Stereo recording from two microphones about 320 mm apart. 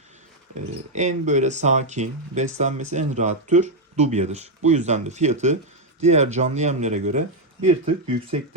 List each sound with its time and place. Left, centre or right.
0.9 s speech: right